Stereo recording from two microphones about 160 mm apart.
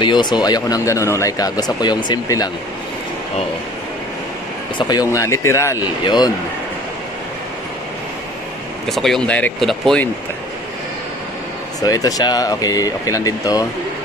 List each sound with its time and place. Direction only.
0.0 s speech: 30° left (ahead or behind)
4.7 s speech: 25° left (ahead or behind)
8.8 s speech: centre (ahead or behind)
11.8 s speech: 25° left (ahead or behind)